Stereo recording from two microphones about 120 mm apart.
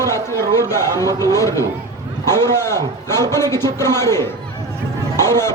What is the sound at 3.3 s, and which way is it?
Speech, 25° left (ahead or behind).